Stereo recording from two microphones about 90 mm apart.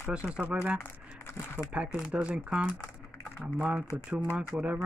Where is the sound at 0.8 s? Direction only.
25° left (ahead or behind).